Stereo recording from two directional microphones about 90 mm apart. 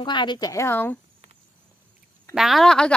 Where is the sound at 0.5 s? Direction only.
30° left (ahead or behind).